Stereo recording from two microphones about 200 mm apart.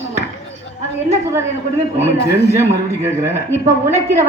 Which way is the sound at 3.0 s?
10° right (ahead or behind).